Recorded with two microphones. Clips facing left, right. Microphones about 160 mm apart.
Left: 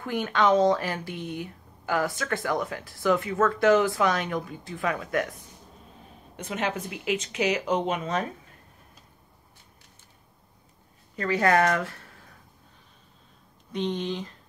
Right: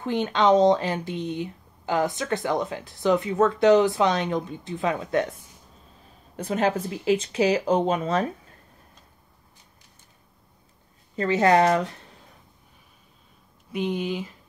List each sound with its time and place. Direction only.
0.0 s speech: 20° right (ahead or behind)
6.3 s speech: 35° right (ahead or behind)
11.1 s speech: 25° right (ahead or behind)
13.7 s speech: 10° right (ahead or behind)